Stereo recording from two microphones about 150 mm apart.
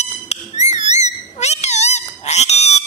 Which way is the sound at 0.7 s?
50° left (ahead or behind).